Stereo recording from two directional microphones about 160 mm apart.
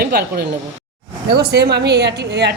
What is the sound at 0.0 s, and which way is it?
A woman's voice, 90° right.